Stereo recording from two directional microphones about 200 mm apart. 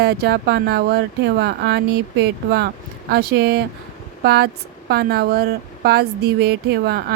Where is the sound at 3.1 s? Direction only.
55° right (ahead or behind).